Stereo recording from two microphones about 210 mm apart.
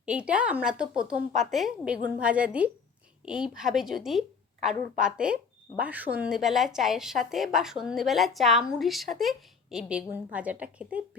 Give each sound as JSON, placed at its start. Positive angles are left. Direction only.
{"t": 0.0, "sound": "a woman's voice", "side_deg": -5}